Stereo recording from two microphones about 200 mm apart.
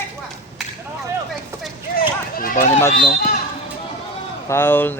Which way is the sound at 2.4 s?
40° left (ahead or behind).